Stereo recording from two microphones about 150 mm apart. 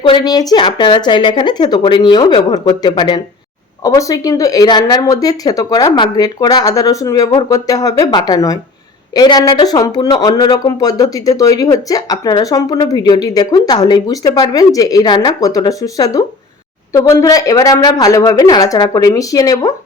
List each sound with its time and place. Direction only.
0.0 s speech: 30° left (ahead or behind)